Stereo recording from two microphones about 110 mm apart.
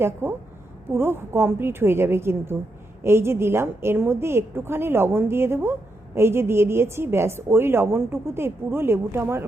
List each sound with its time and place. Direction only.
0.0 s a woman's voice: 20° right (ahead or behind)